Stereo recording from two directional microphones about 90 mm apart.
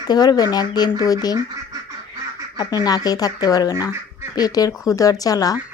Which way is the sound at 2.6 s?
45° left (ahead or behind).